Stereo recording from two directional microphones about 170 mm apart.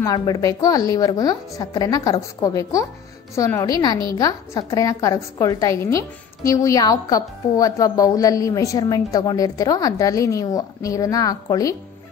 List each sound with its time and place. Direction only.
0.0 s a woman's voice: 25° left (ahead or behind)